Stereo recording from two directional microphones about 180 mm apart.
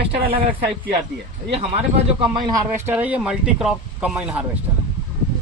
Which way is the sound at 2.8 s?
10° right (ahead or behind).